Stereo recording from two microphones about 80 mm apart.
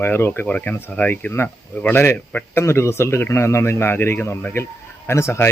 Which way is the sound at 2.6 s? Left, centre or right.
Left.